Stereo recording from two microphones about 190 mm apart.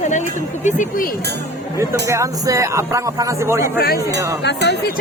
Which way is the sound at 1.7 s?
15° right (ahead or behind).